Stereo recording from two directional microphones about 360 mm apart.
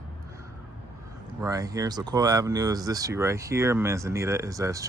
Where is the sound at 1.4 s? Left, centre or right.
Centre.